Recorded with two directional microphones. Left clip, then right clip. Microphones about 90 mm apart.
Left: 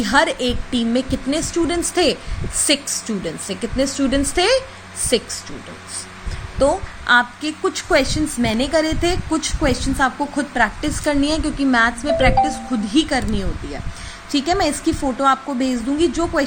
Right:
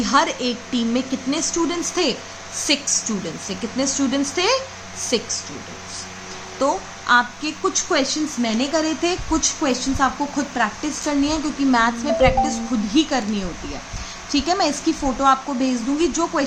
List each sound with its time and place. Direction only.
0.0 s a woman's voice: 50° left (ahead or behind)
6.6 s a woman's voice: 55° left (ahead or behind)
7.9 s a woman's voice: 70° left (ahead or behind)
11.7 s a woman's voice: 35° left (ahead or behind)
14.3 s a woman's voice: 40° left (ahead or behind)